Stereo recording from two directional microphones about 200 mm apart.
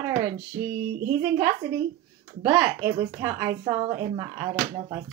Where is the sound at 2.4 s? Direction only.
10° right (ahead or behind).